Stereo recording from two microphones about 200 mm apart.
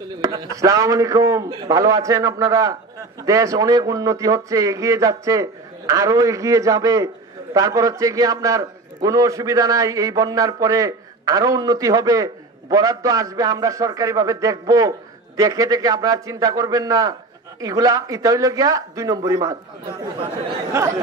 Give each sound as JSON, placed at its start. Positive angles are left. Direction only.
{"t": 0.2, "sound": "a man's voice", "side_deg": -15}
{"t": 20.7, "sound": "a man's voice", "side_deg": -15}